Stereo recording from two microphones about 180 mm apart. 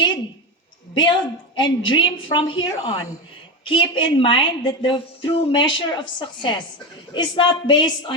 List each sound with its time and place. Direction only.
0.9 s a woman's voice: 25° left (ahead or behind)